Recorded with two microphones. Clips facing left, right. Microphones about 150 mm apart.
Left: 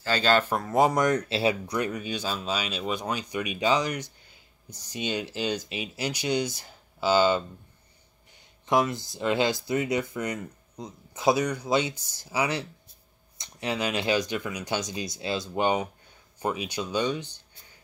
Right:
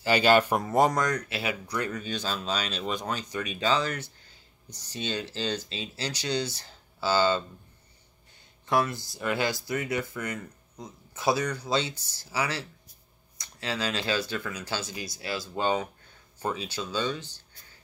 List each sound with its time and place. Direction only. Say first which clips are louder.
0.0 s speech: right 2 dB; 15° right (ahead or behind)
0.9 s speech: left 4 dB; 25° left (ahead or behind)
8.6 s speech: left 2 dB; 20° left (ahead or behind)